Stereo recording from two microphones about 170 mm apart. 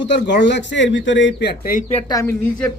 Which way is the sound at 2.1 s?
20° left (ahead or behind).